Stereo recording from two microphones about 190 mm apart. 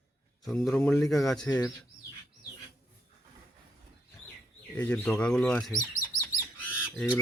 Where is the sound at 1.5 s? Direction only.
20° left (ahead or behind).